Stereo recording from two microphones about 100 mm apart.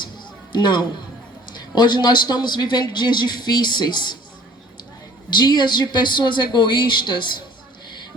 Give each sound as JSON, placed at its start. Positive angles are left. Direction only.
{"t": 0.5, "sound": "speech", "side_deg": 50}
{"t": 5.3, "sound": "speech", "side_deg": 50}